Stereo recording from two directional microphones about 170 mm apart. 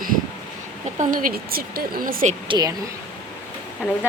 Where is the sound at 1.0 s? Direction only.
55° right (ahead or behind).